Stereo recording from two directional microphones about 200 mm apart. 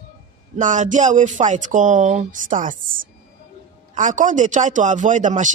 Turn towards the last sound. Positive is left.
turn(degrees=-40)  # may be behind; listen again after turning